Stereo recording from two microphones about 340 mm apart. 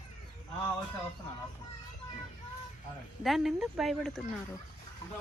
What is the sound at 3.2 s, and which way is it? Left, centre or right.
Speech, centre.